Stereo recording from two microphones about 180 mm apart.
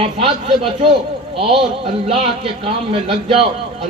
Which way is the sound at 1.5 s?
30° right (ahead or behind).